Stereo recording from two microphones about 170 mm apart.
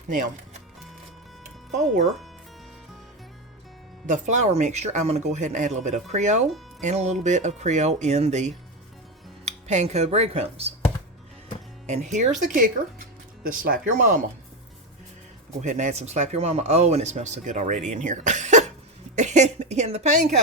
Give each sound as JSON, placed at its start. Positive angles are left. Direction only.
{"t": 4.0, "sound": "speech", "side_deg": -45}
{"t": 11.9, "sound": "speech", "side_deg": -45}
{"t": 15.6, "sound": "speech", "side_deg": -45}
{"t": 19.1, "sound": "a sound", "side_deg": -45}